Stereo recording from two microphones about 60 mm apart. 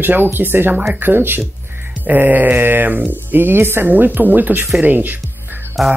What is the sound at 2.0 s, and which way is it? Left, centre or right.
Mantra, right.